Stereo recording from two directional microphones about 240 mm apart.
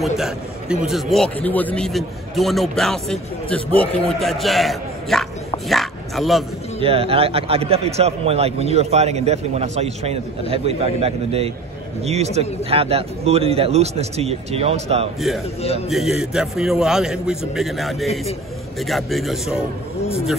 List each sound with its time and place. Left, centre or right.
0.0 s a man's voice: centre
5.7 s dog: centre
6.8 s a man's voice: right
15.1 s a man's voice: centre